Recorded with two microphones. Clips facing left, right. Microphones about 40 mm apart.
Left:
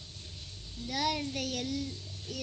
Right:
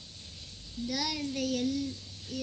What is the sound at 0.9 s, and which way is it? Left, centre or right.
A child's voice, left.